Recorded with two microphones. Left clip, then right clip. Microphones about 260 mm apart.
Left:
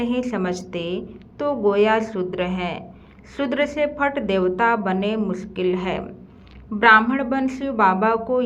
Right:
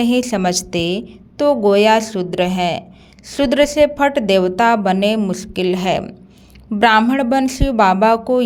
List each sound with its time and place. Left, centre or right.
0.0 s a woman's voice: right